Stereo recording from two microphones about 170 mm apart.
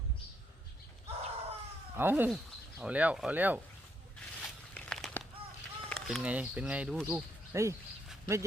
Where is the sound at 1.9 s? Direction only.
10° right (ahead or behind).